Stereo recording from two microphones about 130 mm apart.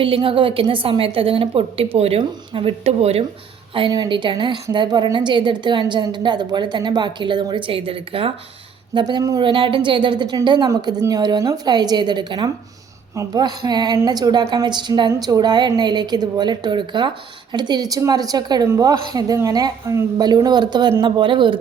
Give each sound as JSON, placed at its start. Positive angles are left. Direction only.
{"t": 0.0, "sound": "a woman's voice", "side_deg": -45}
{"t": 3.8, "sound": "a woman's voice", "side_deg": -35}
{"t": 9.0, "sound": "a woman's voice", "side_deg": -35}